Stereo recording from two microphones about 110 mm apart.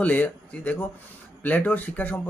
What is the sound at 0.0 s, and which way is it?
Speech, 15° left (ahead or behind).